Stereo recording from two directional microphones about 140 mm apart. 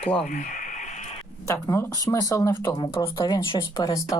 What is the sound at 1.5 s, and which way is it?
Speech, 20° left (ahead or behind).